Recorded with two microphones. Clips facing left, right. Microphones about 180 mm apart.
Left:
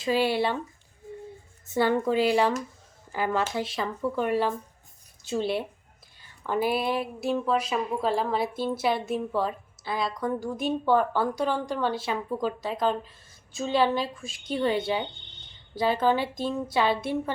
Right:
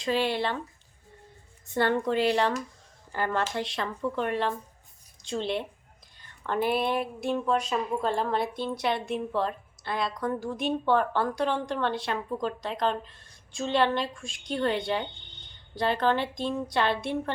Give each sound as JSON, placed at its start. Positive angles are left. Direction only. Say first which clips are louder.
{"t": 0.0, "sound": "speech", "louder": "left 3 dB", "side_deg": 5}
{"t": 1.6, "sound": "speech", "louder": "left 2 dB", "side_deg": 5}